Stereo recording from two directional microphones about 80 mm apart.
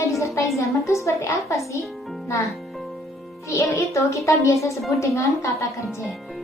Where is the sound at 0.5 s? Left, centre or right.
Left.